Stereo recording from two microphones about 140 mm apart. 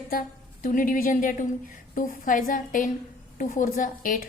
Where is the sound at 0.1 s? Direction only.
80° left.